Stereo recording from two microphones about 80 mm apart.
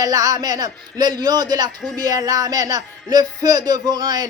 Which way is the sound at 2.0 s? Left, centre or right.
Right.